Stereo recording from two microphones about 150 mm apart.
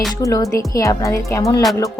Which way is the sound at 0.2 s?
20° left (ahead or behind).